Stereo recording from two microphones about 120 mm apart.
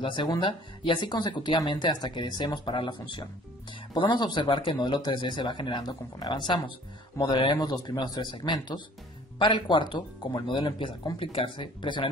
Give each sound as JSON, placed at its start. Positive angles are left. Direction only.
{"t": 0.0, "sound": "speech", "side_deg": 40}